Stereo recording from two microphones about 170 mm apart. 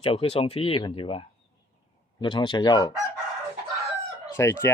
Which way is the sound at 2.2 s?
25° left (ahead or behind).